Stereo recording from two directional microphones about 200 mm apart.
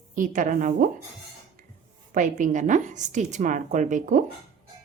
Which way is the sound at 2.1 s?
40° right (ahead or behind).